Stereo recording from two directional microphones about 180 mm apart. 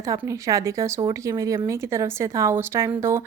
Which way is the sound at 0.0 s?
20° right (ahead or behind).